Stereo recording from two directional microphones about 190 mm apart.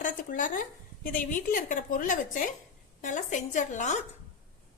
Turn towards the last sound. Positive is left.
turn(degrees=40)  # may be behind; listen again after turning